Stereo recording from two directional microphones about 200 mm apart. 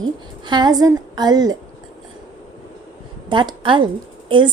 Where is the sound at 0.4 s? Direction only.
20° right (ahead or behind).